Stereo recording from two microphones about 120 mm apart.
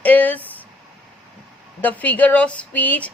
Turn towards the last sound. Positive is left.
turn(degrees=15)  # may be behind; listen again after turning